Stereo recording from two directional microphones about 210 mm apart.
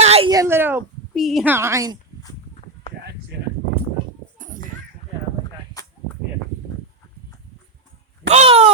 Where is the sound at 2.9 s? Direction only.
30° left (ahead or behind).